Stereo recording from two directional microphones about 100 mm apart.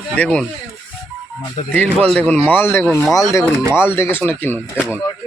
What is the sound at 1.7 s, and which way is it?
Speech, 10° left (ahead or behind).